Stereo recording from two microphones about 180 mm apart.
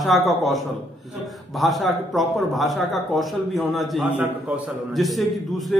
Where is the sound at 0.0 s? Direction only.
Centre (ahead or behind).